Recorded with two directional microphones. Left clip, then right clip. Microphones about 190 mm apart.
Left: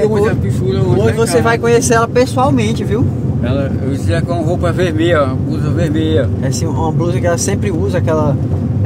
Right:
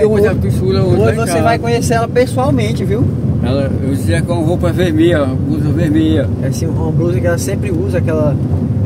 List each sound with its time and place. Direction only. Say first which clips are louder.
0.1 s speech: right 2 dB; 25° right (ahead or behind)
1.9 s speech: left 1 dB; 65° left (ahead or behind)
4.7 s speech: even; 10° right (ahead or behind)